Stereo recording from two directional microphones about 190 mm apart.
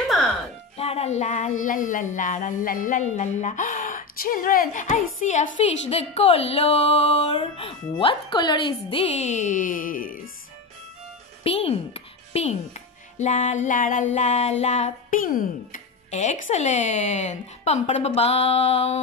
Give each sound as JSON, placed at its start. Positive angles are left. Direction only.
{"t": 0.7, "sound": "a woman's voice", "side_deg": 30}
{"t": 11.4, "sound": "a child's voice", "side_deg": 30}